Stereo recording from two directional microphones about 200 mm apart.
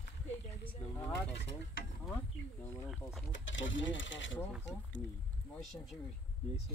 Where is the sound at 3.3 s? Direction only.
70° left (ahead or behind).